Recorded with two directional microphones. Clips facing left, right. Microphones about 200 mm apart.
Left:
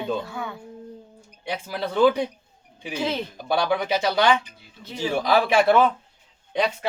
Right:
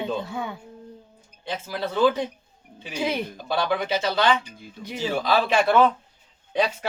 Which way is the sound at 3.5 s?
15° left (ahead or behind).